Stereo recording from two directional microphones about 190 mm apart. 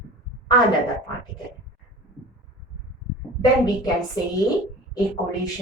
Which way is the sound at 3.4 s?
20° left (ahead or behind).